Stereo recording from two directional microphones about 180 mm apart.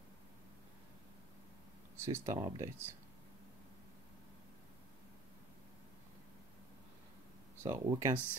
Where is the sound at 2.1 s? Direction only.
20° right (ahead or behind).